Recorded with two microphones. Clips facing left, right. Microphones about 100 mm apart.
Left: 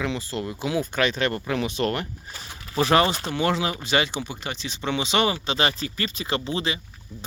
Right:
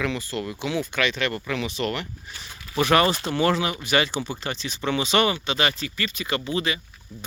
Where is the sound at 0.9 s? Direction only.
40° left (ahead or behind); by 3.6 s 15° left (ahead or behind).